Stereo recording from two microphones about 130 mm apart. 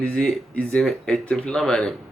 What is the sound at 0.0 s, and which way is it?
Speech, 5° left (ahead or behind).